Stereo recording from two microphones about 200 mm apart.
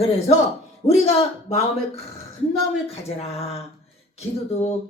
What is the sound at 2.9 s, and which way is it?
Speech, 30° left (ahead or behind).